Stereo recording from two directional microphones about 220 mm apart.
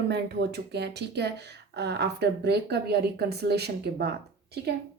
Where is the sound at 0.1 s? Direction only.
50° right (ahead or behind).